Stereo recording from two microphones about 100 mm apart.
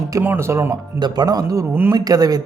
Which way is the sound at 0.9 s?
45° right (ahead or behind).